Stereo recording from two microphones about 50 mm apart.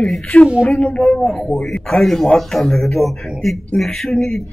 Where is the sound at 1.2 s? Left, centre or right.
Centre.